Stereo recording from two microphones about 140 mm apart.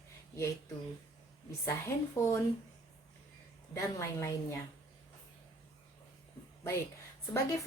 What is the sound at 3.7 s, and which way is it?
Speech, 20° left (ahead or behind).